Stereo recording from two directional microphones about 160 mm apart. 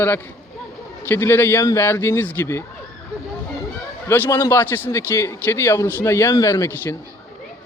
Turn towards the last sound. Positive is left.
turn(degrees=20)  # may be behind; listen again after turning